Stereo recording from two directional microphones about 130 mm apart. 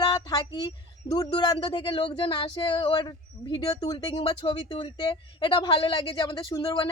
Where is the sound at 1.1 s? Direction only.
30° left (ahead or behind).